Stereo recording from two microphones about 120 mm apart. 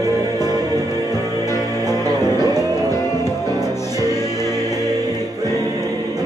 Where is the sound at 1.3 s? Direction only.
25° left (ahead or behind).